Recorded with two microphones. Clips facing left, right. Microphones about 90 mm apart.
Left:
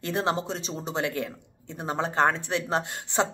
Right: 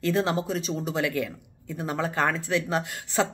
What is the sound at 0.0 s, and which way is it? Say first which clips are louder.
Speech: right 2 dB; 30° left (ahead or behind).